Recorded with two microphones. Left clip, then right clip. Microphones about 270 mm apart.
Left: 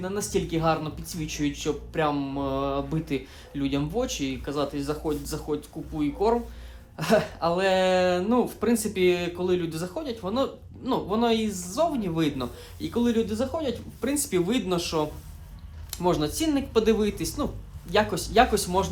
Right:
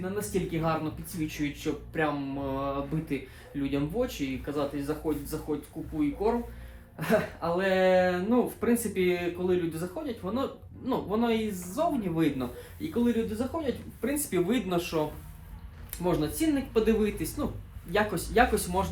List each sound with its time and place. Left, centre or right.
0.0 s a woman's voice: centre